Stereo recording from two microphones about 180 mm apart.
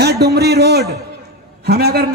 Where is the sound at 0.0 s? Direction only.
65° right (ahead or behind).